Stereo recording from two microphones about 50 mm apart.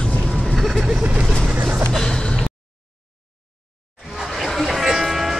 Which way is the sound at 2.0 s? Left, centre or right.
Centre.